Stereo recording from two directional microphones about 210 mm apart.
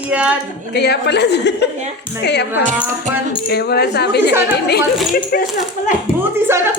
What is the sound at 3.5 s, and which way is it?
A woman's voice, 50° left (ahead or behind).